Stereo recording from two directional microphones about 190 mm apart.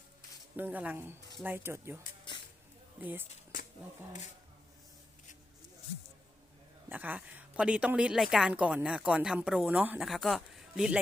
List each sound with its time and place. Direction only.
0.5 s speech: 10° right (ahead or behind)
2.3 s a sound: 25° left (ahead or behind)
3.0 s speech: 10° right (ahead or behind)
6.8 s a woman's voice: 10° right (ahead or behind)